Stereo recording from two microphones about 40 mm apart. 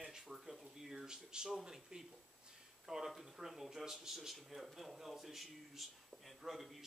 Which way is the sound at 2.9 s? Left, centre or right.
Centre.